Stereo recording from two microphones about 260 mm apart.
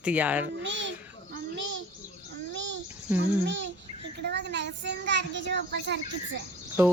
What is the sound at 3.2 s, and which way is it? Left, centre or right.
A child's voice, right.